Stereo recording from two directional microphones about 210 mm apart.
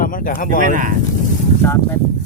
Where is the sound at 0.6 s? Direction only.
40° right (ahead or behind).